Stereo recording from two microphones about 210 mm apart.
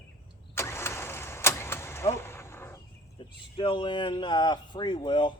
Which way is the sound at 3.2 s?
25° left (ahead or behind).